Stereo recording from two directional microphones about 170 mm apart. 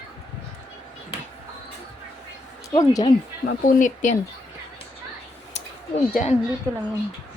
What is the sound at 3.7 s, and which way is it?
Speech, 50° left (ahead or behind).